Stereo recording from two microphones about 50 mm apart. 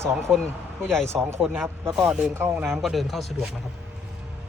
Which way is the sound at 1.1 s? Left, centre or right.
Right.